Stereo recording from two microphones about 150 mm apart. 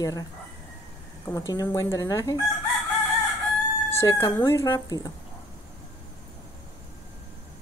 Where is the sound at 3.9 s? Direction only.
20° left (ahead or behind).